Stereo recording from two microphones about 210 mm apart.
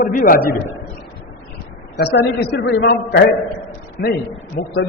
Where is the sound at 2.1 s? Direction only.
55° left (ahead or behind).